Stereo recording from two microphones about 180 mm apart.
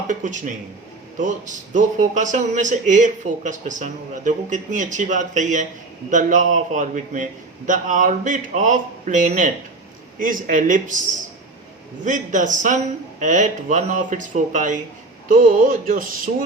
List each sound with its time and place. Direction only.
0.1 s a man's voice: 45° right (ahead or behind)